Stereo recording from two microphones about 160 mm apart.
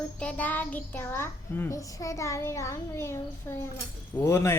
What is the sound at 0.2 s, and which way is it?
A child's voice, 10° left (ahead or behind).